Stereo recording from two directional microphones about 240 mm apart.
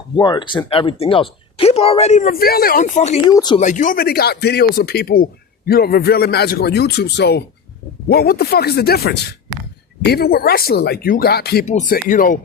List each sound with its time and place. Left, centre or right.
0.2 s speech: centre
3.3 s speech: centre
3.6 s speech: left
11.6 s speech: left